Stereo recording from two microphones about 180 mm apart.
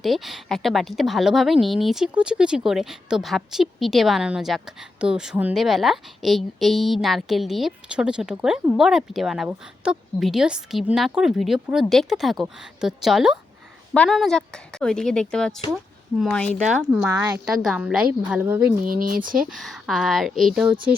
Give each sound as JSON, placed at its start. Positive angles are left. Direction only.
{"t": 0.0, "sound": "speech", "side_deg": 0}
{"t": 17.1, "sound": "a woman's voice", "side_deg": -10}
{"t": 18.8, "sound": "speech", "side_deg": -50}
{"t": 19.4, "sound": "speech", "side_deg": 0}